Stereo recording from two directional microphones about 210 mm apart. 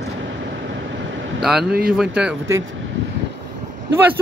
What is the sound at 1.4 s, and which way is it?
Speech, centre (ahead or behind).